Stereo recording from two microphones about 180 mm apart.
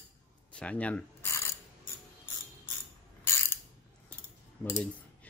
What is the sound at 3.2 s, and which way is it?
Mechanisms, 15° left (ahead or behind).